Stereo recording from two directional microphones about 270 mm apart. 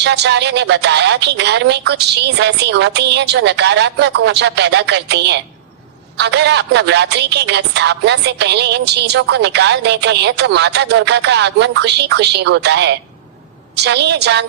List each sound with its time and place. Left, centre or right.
0.0 s a woman's voice: right